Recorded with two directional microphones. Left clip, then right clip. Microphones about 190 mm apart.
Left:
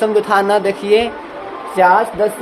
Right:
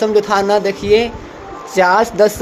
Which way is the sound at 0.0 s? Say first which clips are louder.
Even; 25° right (ahead or behind).